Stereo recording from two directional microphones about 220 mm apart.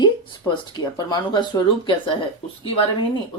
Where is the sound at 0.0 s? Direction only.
20° left (ahead or behind).